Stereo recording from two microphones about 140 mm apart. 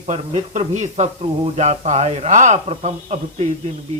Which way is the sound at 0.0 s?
50° right (ahead or behind).